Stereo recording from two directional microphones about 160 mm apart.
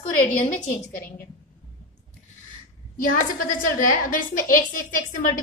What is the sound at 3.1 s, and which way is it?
A woman's voice, 60° left (ahead or behind).